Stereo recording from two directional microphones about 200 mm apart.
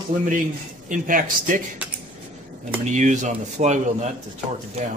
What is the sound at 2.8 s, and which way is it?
Speech, 40° right (ahead or behind).